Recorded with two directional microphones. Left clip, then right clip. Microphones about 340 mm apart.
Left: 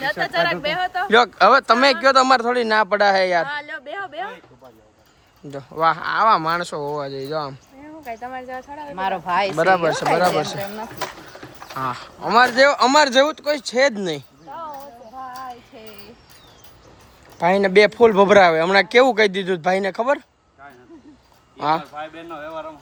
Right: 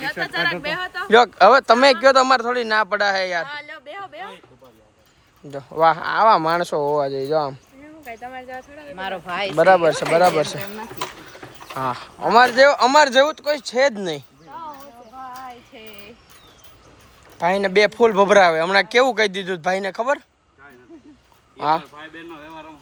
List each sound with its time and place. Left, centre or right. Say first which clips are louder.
0.0 s speech: left 2 dB; left
1.1 s speech: right 2 dB; centre
3.4 s a sound: left 4 dB; left
5.5 s speech: right 2 dB; centre
8.0 s speech: left 3 dB; left
9.6 s speech: right 6 dB; centre
17.3 s speech: left 3 dB; centre
21.6 s speech: even; centre